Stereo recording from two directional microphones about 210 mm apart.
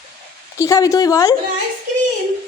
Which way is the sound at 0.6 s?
15° left (ahead or behind).